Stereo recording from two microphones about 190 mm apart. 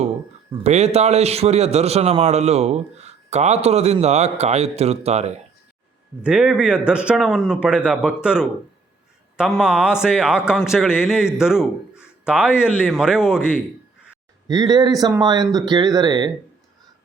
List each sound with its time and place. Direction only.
0.6 s a man's voice: 35° right (ahead or behind)
6.2 s a man's voice: 5° right (ahead or behind)
9.6 s a man's voice: 5° right (ahead or behind)
14.4 s speech: 20° right (ahead or behind)